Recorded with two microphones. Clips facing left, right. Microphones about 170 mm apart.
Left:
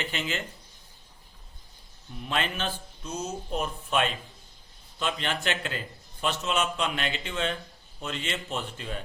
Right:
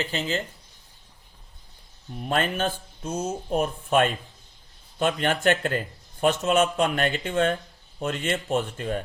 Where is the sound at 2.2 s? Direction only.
45° right (ahead or behind).